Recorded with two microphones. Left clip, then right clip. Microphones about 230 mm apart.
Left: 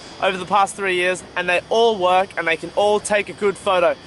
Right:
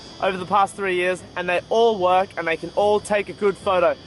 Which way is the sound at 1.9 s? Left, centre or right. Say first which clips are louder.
Left 2 dB; centre.